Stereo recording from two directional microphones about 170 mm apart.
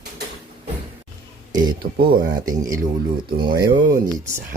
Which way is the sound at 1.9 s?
60° right (ahead or behind).